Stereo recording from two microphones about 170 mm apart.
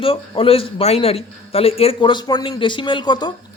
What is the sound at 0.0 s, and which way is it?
A man's voice, 35° left (ahead or behind).